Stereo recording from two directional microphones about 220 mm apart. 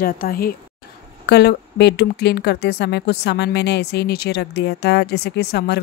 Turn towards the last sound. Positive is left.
turn(degrees=50)  # may be behind; listen again after turning